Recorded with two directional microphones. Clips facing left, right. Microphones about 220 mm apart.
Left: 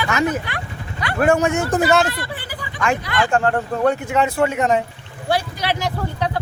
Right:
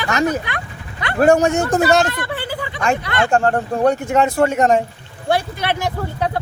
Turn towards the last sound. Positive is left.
turn(degrees=-50)  # may be behind; listen again after turning